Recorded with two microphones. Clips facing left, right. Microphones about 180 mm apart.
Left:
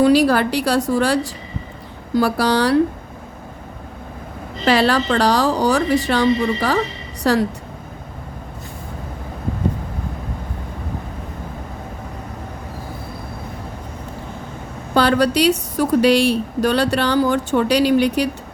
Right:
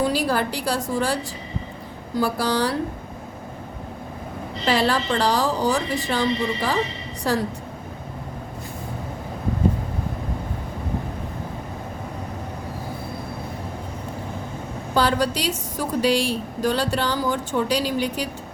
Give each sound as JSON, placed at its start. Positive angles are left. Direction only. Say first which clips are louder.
{"t": 0.0, "sound": "a woman's voice", "louder": "left 8 dB", "side_deg": 75}
{"t": 4.6, "sound": "a woman's voice", "louder": "left 5 dB", "side_deg": 75}
{"t": 14.9, "sound": "a woman's voice", "louder": "left 6 dB", "side_deg": 70}